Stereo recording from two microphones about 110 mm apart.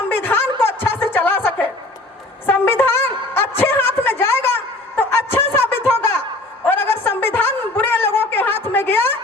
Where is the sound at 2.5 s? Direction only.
20° left (ahead or behind).